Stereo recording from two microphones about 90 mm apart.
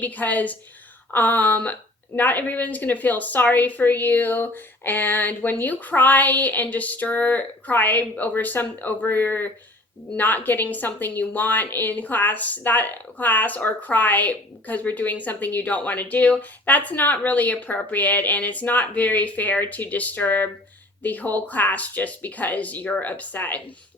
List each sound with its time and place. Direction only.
0.0 s a woman's voice: 20° left (ahead or behind)